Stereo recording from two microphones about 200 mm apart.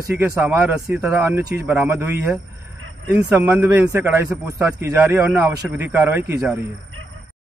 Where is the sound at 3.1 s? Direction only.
5° right (ahead or behind).